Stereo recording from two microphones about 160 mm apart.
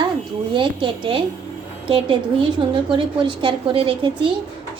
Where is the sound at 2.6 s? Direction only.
30° right (ahead or behind).